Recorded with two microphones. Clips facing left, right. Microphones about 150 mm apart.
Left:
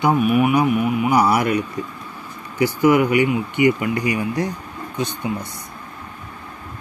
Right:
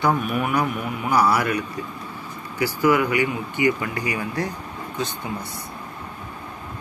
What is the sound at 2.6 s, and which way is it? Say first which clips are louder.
Speech: left 4 dB; 20° left (ahead or behind).